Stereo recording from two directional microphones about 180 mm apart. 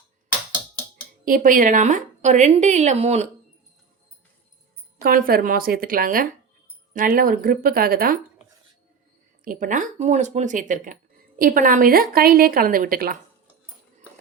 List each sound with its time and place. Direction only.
1.2 s a woman's voice: 50° right (ahead or behind)
5.0 s a woman's voice: 55° right (ahead or behind)
9.4 s a woman's voice: 50° right (ahead or behind)